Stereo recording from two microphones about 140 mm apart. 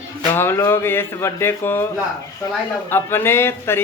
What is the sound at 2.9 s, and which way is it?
Speech, 15° left (ahead or behind).